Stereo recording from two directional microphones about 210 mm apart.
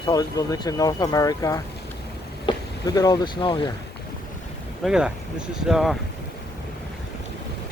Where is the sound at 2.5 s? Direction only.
25° left (ahead or behind).